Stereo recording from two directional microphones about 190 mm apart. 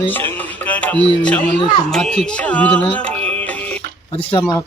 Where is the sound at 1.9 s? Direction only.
5° left (ahead or behind).